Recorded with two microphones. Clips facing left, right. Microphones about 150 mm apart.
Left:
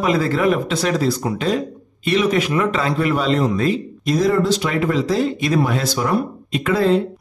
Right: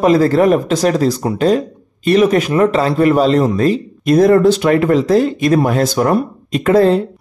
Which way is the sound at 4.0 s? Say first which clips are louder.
Right 8 dB; 55° right (ahead or behind).